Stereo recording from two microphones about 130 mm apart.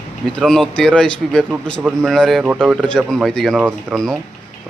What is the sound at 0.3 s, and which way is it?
Speech, 5° left (ahead or behind).